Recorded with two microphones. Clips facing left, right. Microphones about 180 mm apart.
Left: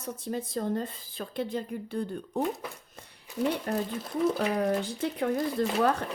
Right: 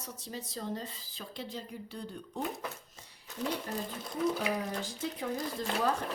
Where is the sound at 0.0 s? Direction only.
55° left (ahead or behind).